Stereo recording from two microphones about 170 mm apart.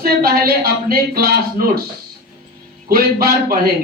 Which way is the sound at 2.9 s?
60° right (ahead or behind).